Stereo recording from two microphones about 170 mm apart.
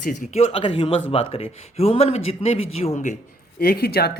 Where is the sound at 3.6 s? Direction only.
60° left (ahead or behind).